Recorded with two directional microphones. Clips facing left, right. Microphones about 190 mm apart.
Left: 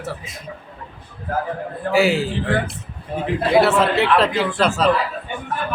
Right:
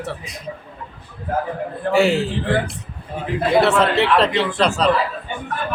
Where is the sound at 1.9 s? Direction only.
Centre (ahead or behind).